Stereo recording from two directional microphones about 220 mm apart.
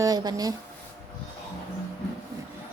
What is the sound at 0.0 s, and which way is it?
Speech, 15° right (ahead or behind).